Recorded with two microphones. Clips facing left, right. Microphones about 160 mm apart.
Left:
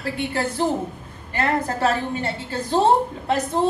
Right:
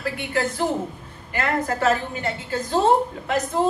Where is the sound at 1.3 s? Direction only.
30° left (ahead or behind).